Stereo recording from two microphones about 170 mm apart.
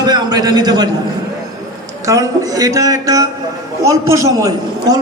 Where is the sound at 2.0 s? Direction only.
20° right (ahead or behind).